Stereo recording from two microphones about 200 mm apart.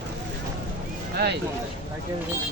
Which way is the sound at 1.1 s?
55° right (ahead or behind).